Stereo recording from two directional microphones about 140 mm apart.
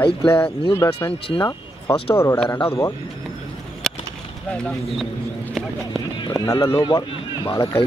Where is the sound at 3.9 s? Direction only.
5° left (ahead or behind).